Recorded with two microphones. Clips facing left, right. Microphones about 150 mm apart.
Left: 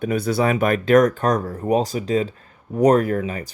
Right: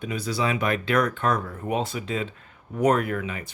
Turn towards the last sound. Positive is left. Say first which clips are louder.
# left 6 dB
turn(degrees=40)  # may be behind; listen again after turning